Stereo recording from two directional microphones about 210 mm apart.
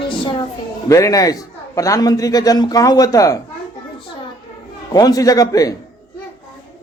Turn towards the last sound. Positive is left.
turn(degrees=15)  # may be behind; listen again after turning